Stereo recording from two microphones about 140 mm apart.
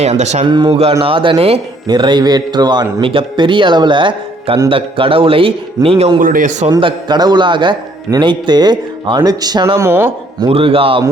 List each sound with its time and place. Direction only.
0.0 s speech: 55° right (ahead or behind)
0.4 s a man's voice: 30° right (ahead or behind)
0.7 s a man's voice: 45° right (ahead or behind)
1.9 s a man's voice: 30° right (ahead or behind)
6.1 s a man's voice: 75° right (ahead or behind)
6.7 s a man's voice: 35° right (ahead or behind)
9.8 s speech: 15° right (ahead or behind)
10.5 s a man's voice: 40° right (ahead or behind)